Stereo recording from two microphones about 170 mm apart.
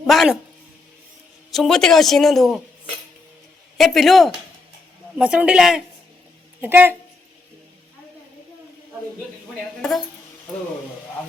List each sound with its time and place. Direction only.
0.1 s speech: centre (ahead or behind)
1.5 s speech: centre (ahead or behind)
3.8 s speech: centre (ahead or behind)